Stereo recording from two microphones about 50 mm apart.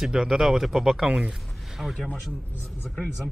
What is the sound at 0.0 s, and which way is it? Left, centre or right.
Speech, centre.